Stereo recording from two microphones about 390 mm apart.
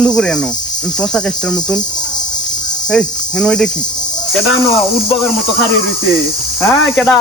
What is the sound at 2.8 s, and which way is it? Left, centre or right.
Speech, centre.